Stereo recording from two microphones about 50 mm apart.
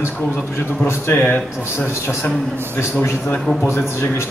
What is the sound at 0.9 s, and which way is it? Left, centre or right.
Speech, left.